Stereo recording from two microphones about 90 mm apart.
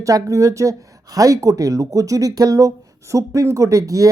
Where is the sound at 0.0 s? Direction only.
35° right (ahead or behind).